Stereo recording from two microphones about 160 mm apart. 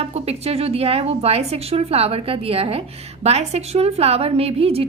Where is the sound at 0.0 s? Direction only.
40° right (ahead or behind).